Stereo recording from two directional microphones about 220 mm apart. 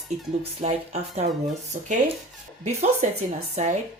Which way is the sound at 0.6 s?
30° right (ahead or behind).